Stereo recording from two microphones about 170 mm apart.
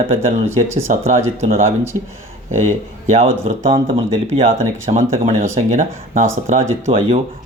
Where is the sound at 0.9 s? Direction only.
45° right (ahead or behind).